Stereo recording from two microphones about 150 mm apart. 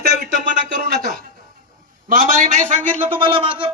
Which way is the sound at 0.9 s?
75° right (ahead or behind).